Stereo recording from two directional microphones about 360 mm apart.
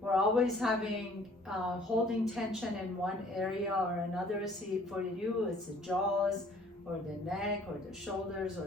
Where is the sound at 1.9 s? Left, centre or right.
Centre.